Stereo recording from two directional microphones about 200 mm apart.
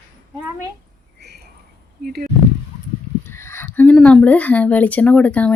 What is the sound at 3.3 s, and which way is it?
Speech, 10° left (ahead or behind).